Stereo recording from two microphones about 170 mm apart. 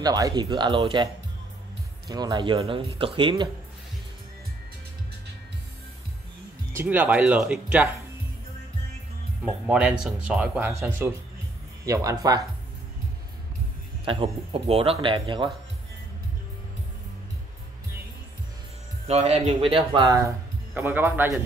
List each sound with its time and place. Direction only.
0.0 s speech: 20° right (ahead or behind)
2.0 s speech: 25° right (ahead or behind)
6.7 s speech: 10° right (ahead or behind)
9.4 s speech: 5° right (ahead or behind)
14.0 s speech: 30° right (ahead or behind)
19.0 s speech: 40° right (ahead or behind)
20.1 s speech: 15° right (ahead or behind)